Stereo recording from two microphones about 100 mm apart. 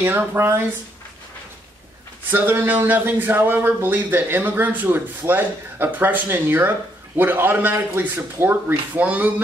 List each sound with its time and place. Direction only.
0.0 s speech: 20° right (ahead or behind)
2.3 s speech: 20° right (ahead or behind)